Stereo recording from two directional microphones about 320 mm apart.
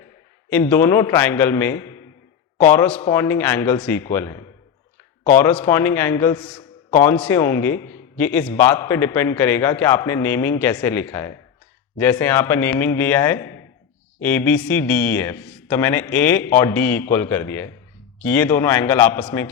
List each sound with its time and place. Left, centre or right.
0.5 s a man's voice: centre